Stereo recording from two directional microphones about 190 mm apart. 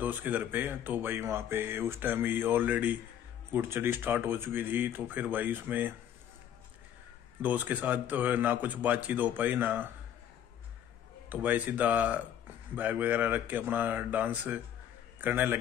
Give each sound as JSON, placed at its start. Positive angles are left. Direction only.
{"t": 0.0, "sound": "speech", "side_deg": -10}
{"t": 7.4, "sound": "speech", "side_deg": -10}
{"t": 11.2, "sound": "a man's voice", "side_deg": -10}